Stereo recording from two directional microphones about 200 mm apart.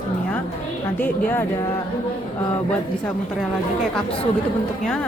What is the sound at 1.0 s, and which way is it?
Speech, 10° left (ahead or behind).